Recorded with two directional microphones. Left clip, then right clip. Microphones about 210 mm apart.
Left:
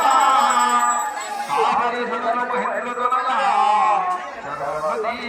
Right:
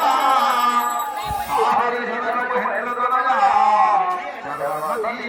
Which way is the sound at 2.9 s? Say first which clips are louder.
Right 2 dB; 45° right (ahead or behind).